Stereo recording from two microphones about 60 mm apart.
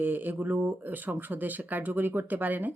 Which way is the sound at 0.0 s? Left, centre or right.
Right.